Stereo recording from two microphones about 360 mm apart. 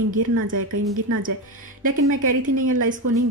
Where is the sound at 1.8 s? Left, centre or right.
Right.